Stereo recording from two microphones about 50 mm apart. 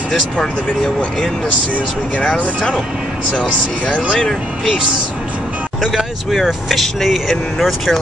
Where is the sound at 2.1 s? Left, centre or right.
Left.